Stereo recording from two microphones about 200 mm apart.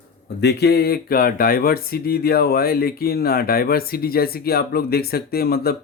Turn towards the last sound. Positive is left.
turn(degrees=50)  # may be behind; listen again after turning